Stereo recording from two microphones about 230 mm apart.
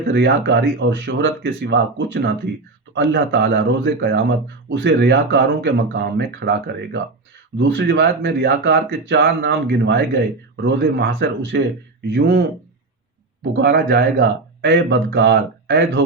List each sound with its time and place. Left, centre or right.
0.1 s speech: right
13.6 s speech: right